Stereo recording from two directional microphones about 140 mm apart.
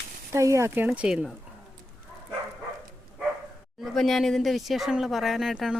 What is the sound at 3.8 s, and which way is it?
Speech, centre (ahead or behind).